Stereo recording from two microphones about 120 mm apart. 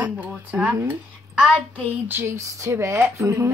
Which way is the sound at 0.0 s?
15° right (ahead or behind).